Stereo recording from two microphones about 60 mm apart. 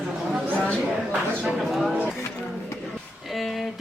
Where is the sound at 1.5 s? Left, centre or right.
Centre.